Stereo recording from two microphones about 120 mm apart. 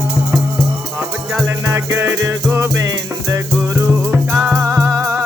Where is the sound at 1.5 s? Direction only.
25° right (ahead or behind).